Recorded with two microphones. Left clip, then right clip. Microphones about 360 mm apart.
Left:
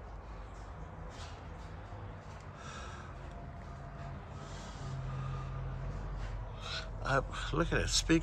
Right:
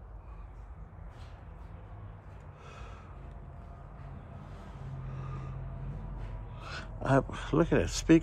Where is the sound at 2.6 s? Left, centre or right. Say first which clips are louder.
Left 3 dB; centre.